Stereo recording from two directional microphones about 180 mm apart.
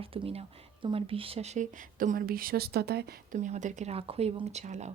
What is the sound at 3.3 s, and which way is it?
Speech, 40° right (ahead or behind).